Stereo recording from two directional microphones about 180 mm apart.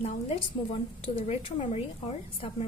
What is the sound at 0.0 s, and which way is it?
A woman's voice, 30° left (ahead or behind).